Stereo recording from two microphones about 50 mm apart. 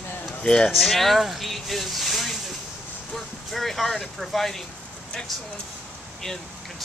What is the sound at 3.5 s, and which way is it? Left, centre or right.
Speech, centre.